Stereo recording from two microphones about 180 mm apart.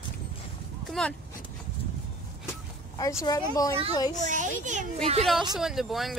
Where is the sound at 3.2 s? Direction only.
20° left (ahead or behind).